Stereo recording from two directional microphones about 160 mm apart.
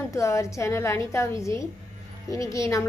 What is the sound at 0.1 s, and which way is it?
A woman's voice, 20° left (ahead or behind).